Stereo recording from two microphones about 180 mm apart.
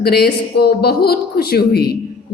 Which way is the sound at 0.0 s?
60° left (ahead or behind).